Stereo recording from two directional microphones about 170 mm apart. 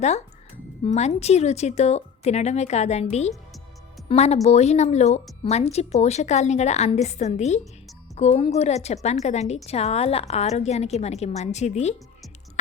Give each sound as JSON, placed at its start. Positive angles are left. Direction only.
{"t": 0.9, "sound": "speech", "side_deg": 40}